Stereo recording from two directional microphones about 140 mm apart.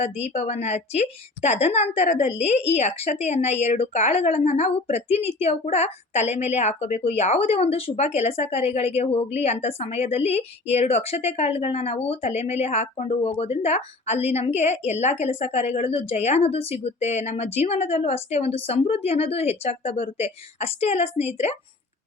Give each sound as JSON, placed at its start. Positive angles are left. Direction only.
{"t": 0.0, "sound": "a woman's voice", "side_deg": 50}